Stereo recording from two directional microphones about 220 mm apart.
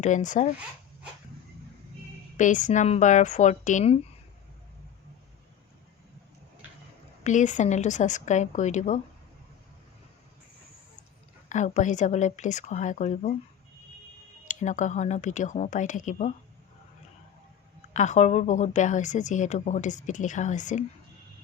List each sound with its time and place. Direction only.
0.0 s a woman's voice: 35° left (ahead or behind)
2.4 s a woman's voice: 35° left (ahead or behind)
7.3 s a woman's voice: 35° left (ahead or behind)
11.4 s a woman's voice: 35° left (ahead or behind)
14.4 s a woman's voice: 35° left (ahead or behind)
17.9 s a woman's voice: 35° left (ahead or behind)